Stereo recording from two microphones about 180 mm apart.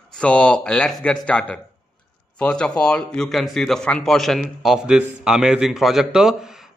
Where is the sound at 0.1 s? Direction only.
5° left (ahead or behind).